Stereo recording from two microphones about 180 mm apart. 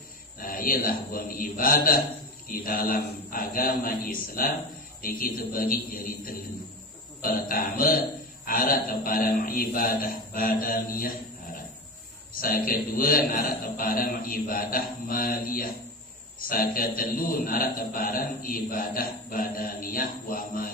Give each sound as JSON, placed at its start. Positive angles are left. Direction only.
{"t": 0.4, "sound": "a man's voice", "side_deg": 50}
{"t": 12.4, "sound": "a man's voice", "side_deg": 55}